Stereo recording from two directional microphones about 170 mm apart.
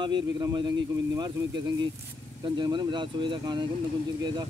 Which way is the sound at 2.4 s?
25° right (ahead or behind).